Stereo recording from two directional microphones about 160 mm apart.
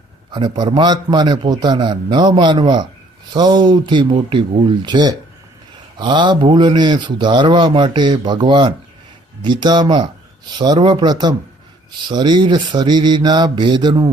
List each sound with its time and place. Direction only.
0.3 s speech: 30° right (ahead or behind)